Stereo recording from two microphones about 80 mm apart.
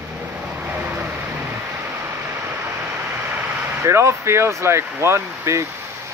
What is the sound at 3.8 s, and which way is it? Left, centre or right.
Speech, right.